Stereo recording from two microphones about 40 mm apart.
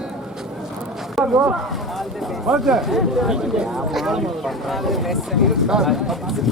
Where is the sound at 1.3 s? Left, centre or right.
Centre.